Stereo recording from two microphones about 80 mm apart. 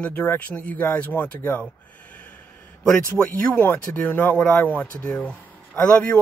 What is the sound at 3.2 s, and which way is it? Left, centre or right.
Speech, centre.